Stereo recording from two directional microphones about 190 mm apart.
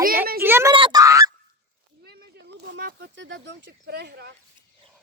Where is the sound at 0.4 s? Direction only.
10° right (ahead or behind).